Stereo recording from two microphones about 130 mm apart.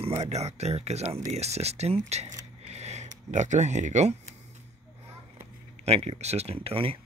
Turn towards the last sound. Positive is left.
turn(degrees=-45)  # may be behind; listen again after turning